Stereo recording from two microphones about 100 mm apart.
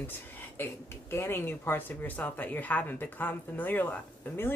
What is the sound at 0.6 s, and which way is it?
Speech, 25° left (ahead or behind).